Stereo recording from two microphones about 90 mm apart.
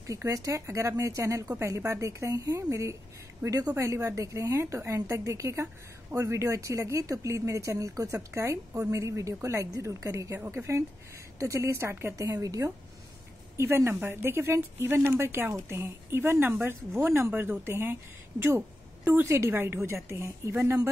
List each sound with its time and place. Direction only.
0.0 s speech: 40° right (ahead or behind)
19.0 s speech: 25° right (ahead or behind)